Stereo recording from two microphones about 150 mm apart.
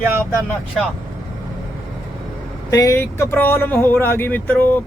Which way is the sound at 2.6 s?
20° left (ahead or behind).